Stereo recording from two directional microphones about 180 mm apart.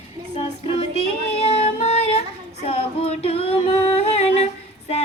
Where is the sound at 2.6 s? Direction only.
35° left (ahead or behind).